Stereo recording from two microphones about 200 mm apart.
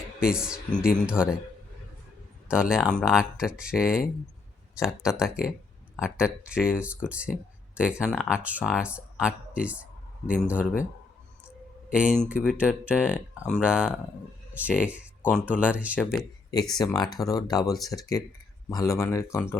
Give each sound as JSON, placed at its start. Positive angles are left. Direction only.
{"t": 0.2, "sound": "speech", "side_deg": -5}
{"t": 2.5, "sound": "speech", "side_deg": -5}
{"t": 5.0, "sound": "speech", "side_deg": 0}
{"t": 11.9, "sound": "speech", "side_deg": -5}
{"t": 16.7, "sound": "speech", "side_deg": 20}